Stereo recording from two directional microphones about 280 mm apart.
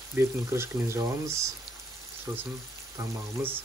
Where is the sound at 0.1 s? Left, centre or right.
Centre.